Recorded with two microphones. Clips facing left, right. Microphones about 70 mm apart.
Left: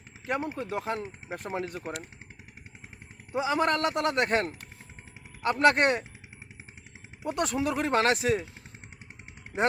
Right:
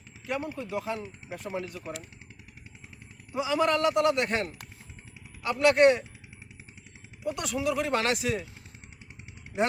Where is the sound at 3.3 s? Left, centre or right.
Left.